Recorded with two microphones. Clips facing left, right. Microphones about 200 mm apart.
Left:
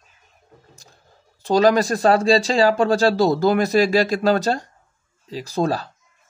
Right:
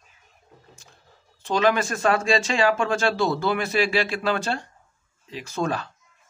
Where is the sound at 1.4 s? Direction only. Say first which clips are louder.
Left 6 dB; 40° left (ahead or behind).